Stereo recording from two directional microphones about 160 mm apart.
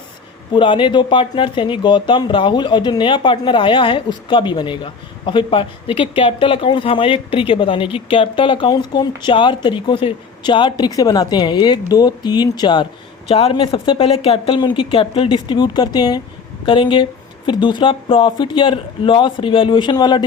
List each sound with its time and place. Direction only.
0.5 s speech: 30° left (ahead or behind)